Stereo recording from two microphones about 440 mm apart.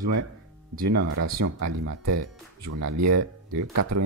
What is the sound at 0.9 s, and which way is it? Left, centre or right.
Speech, right.